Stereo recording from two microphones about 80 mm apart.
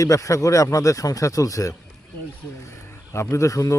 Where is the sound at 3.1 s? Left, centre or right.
Left.